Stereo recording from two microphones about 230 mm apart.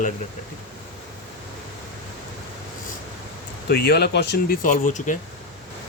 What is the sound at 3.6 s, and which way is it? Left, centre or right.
Speech, left.